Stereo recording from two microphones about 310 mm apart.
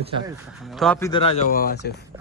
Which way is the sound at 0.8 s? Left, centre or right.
Centre.